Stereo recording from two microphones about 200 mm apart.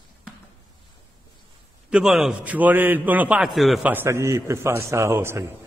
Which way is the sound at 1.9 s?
5° right (ahead or behind).